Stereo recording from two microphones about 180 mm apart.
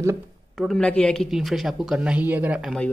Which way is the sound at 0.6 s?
5° left (ahead or behind).